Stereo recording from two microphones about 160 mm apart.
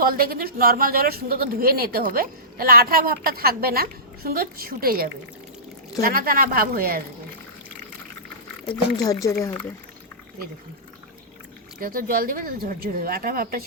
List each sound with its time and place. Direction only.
0.0 s speech: 65° right (ahead or behind)
9.2 s speech: 20° left (ahead or behind)
11.8 s speech: 65° right (ahead or behind)